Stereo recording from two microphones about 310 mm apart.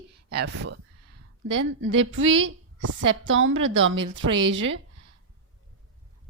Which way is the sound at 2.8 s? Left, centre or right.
Right.